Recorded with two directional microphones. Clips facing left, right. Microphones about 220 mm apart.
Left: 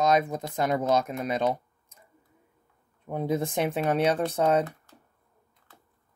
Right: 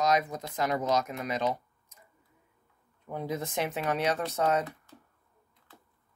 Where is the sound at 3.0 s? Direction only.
30° left (ahead or behind).